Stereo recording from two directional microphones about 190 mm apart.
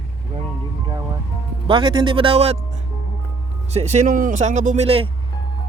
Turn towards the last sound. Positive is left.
turn(degrees=-30)  # may be behind; listen again after turning